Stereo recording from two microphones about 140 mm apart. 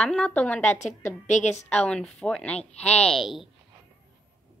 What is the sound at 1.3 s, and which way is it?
Speech, 55° left (ahead or behind).